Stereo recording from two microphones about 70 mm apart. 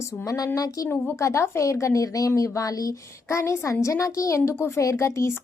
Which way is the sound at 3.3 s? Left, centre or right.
Left.